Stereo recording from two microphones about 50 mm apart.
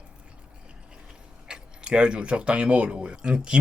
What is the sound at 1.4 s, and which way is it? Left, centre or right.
Speech, centre.